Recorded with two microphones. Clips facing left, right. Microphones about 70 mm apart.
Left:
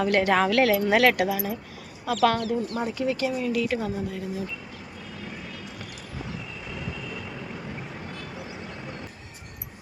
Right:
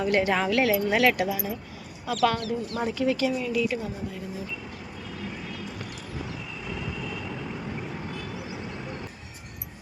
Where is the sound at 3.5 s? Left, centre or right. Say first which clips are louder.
Left 1 dB; left.